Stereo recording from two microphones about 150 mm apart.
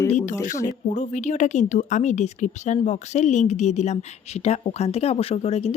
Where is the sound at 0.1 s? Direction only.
50° left (ahead or behind).